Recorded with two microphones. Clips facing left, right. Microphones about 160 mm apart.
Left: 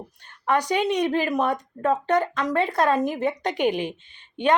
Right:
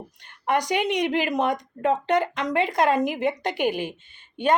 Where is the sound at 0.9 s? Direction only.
15° right (ahead or behind).